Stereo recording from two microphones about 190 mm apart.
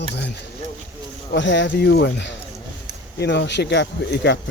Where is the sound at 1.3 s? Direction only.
70° left (ahead or behind).